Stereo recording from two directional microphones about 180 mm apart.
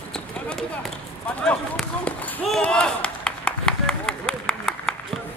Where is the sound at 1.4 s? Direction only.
5° left (ahead or behind).